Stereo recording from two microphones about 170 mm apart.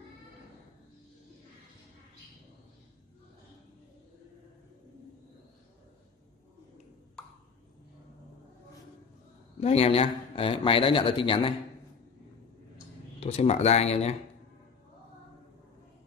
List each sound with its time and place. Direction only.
9.6 s speech: 35° left (ahead or behind)
13.2 s speech: 40° left (ahead or behind)